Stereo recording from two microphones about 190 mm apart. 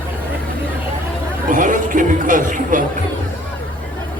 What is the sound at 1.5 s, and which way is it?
Chatter, 45° right (ahead or behind).